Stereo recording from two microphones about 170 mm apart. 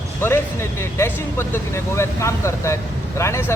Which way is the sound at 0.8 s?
15° left (ahead or behind).